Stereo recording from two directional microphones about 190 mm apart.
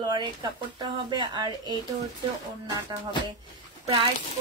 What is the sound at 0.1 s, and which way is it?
Speech, 25° right (ahead or behind).